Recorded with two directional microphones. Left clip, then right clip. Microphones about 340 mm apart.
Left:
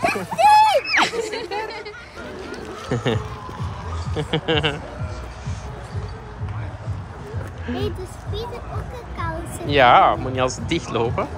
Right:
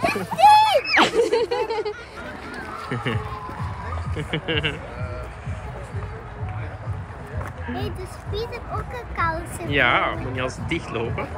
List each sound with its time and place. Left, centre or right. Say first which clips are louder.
0.0 s a sound: right 1 dB; centre
2.5 s duck: left 2 dB; left
4.1 s speech: left 6 dB; left
4.5 s speech: left 4 dB; centre
7.6 s speech: left 5 dB; centre
9.1 s speech: right 5 dB; centre